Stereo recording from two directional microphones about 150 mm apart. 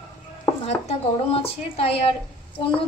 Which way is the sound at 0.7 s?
40° left (ahead or behind).